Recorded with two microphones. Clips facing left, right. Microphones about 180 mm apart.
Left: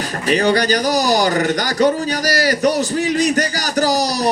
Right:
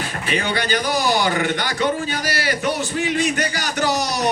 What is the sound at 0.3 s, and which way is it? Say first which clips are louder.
Speech: left 8 dB; 40° left (ahead or behind).